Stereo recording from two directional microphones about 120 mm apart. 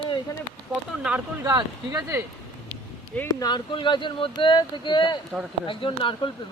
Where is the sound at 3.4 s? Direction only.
40° left (ahead or behind).